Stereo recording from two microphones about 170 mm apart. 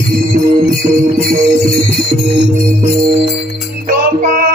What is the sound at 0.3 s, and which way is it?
Jingle bell, 55° right (ahead or behind).